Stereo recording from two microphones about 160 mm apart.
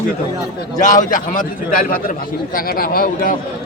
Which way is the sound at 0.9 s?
55° left (ahead or behind).